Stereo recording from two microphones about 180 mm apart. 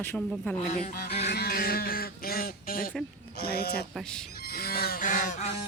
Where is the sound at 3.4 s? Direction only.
60° left (ahead or behind).